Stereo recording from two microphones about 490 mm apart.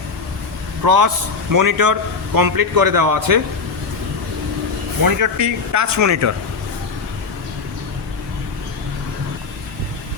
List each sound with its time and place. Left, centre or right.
0.9 s a man's voice: right
5.0 s a man's voice: right